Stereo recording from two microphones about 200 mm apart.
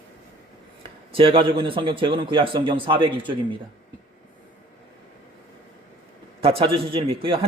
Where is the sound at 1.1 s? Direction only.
25° right (ahead or behind).